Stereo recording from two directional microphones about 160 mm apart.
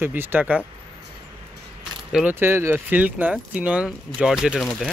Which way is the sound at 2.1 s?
5° right (ahead or behind).